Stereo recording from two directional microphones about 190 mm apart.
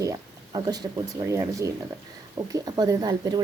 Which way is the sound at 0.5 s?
20° right (ahead or behind).